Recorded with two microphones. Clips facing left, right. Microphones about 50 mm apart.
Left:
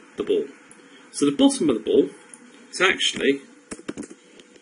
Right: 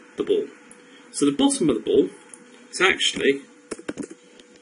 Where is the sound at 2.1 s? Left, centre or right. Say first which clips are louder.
Even; left.